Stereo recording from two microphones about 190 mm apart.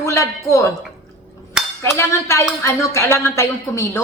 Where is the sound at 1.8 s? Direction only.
15° left (ahead or behind).